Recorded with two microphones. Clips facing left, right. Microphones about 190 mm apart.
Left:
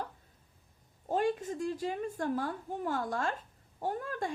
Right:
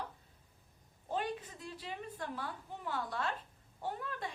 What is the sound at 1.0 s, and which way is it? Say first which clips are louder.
A woman's voice: left 8 dB; 45° left (ahead or behind).